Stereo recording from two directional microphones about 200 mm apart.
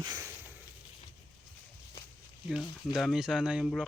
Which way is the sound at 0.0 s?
15° right (ahead or behind).